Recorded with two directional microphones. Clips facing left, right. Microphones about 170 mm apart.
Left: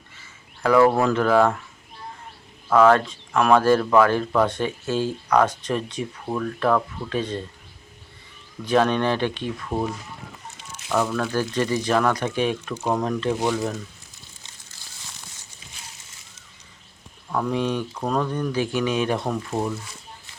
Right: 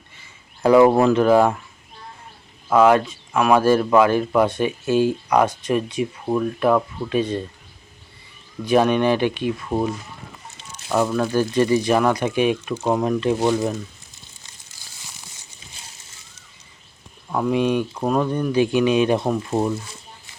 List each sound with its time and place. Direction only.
0.6 s speech: 20° right (ahead or behind)
2.6 s speech: 10° right (ahead or behind)
8.6 s speech: 15° right (ahead or behind)
10.9 s speech: 15° right (ahead or behind)
17.3 s speech: 15° right (ahead or behind)